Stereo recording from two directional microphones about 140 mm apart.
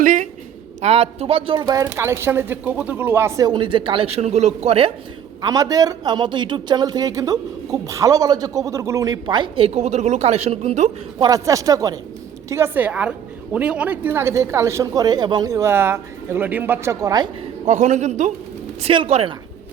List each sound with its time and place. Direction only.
0.0 s a sound: 65° right (ahead or behind)
0.8 s a man's voice: 50° right (ahead or behind)
1.6 s a man's voice: 25° right (ahead or behind); by 4.9 s 50° right (ahead or behind)
5.4 s a man's voice: 25° right (ahead or behind); by 10.8 s 50° right (ahead or behind)
11.2 s a man's voice: 25° right (ahead or behind)
17.7 s a man's voice: 55° right (ahead or behind)
18.8 s a man's voice: 45° right (ahead or behind)